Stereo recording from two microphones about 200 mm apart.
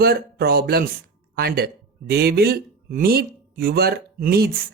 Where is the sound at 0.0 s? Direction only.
50° right (ahead or behind).